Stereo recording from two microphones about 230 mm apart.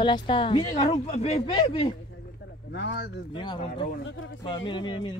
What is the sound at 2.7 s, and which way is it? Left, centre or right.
Speech, left.